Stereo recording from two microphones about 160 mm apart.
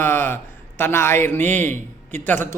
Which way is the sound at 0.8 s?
15° left (ahead or behind).